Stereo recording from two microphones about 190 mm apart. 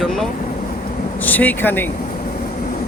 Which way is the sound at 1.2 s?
10° left (ahead or behind).